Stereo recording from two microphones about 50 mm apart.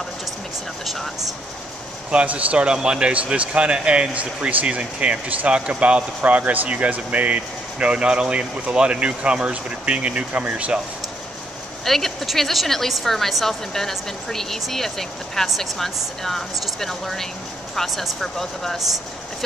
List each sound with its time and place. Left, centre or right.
0.8 s a woman's voice: centre
2.0 s speech: right
11.8 s a woman's voice: centre